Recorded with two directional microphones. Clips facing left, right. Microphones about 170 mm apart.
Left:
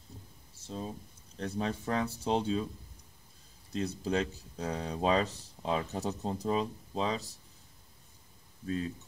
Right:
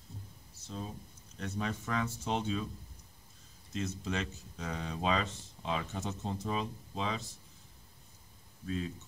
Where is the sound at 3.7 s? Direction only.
35° left (ahead or behind).